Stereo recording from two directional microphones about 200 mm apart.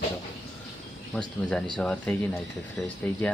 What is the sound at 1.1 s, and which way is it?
Speech, 5° left (ahead or behind).